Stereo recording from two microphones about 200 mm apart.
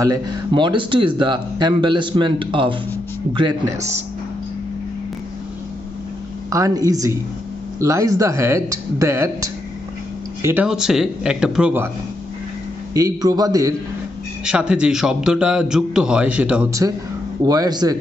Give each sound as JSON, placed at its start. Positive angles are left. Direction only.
{"t": 0.0, "sound": "speech", "side_deg": -20}
{"t": 6.5, "sound": "a man's voice", "side_deg": -15}
{"t": 12.9, "sound": "speech", "side_deg": -20}
{"t": 14.4, "sound": "a man's voice", "side_deg": -5}
{"t": 17.5, "sound": "speech", "side_deg": -20}